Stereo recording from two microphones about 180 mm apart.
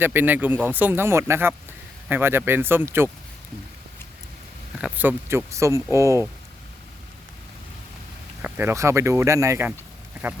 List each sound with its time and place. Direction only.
0.0 s speech: 10° right (ahead or behind)
4.8 s speech: 10° right (ahead or behind)
8.4 s speech: 10° right (ahead or behind)